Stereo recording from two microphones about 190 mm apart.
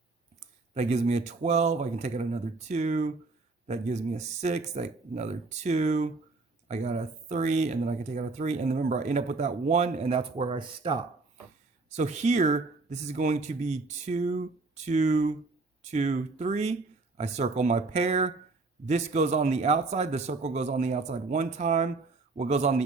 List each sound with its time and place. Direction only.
0.3 s speech: 35° right (ahead or behind)